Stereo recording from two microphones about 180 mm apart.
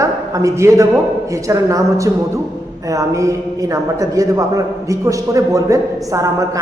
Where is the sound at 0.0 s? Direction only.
15° right (ahead or behind).